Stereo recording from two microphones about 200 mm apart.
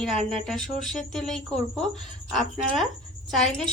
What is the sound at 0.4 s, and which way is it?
A woman's voice, centre (ahead or behind).